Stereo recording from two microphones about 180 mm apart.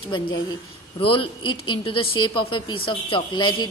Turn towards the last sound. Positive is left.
turn(degrees=25)  # may be behind; listen again after turning